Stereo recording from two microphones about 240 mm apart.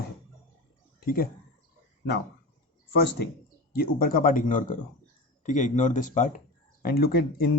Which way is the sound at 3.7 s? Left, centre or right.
Left.